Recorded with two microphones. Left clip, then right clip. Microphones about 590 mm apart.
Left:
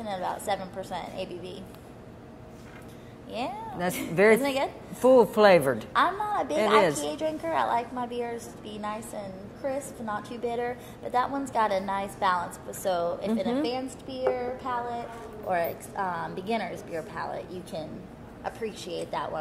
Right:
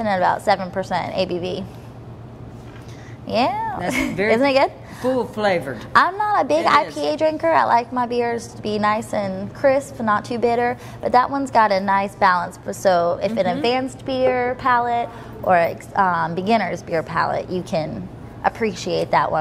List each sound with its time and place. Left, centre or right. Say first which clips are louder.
0.0 s a woman's voice: right 13 dB; right
3.3 s a woman's voice: right 14 dB; right
5.1 s speech: left 2 dB; left
5.9 s a woman's voice: right 11 dB; right
18.7 s a woman's voice: right 12 dB; right
19.0 s speech: right 15 dB; right